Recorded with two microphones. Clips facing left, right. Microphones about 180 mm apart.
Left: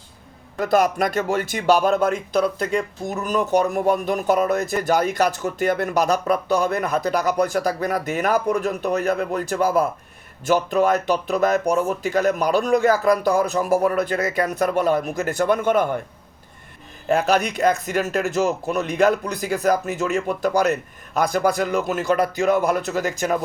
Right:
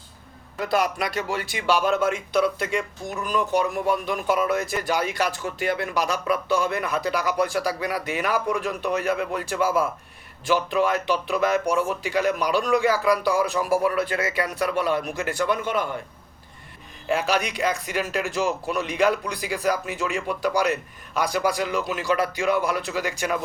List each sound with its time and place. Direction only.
0.6 s speech: 45° left (ahead or behind)
17.1 s speech: 45° left (ahead or behind)